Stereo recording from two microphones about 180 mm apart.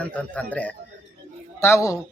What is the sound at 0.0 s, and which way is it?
Speech, 5° left (ahead or behind).